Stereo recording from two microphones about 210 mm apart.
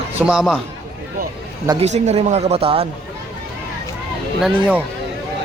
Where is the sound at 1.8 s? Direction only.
30° right (ahead or behind).